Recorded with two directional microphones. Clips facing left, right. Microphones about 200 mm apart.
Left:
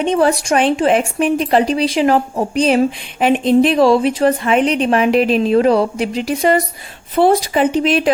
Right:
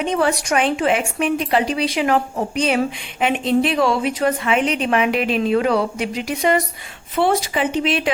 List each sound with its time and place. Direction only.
0.0 s speech: 35° left (ahead or behind)